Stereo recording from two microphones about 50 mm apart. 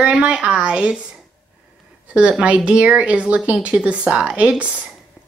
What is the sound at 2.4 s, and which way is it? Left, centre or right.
Speech, right.